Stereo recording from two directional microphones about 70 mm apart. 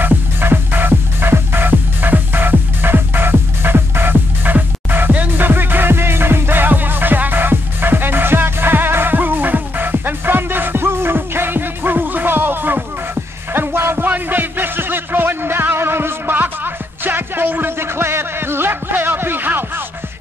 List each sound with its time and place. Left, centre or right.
0.0 s music: right